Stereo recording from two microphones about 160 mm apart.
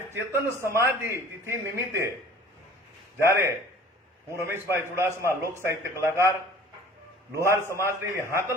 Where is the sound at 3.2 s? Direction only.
15° right (ahead or behind).